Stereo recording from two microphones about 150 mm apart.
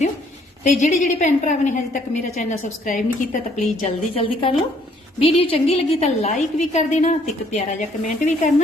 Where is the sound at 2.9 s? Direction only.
55° left (ahead or behind).